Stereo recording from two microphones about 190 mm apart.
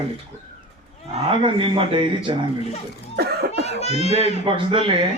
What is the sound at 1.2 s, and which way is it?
A man's voice, 25° right (ahead or behind).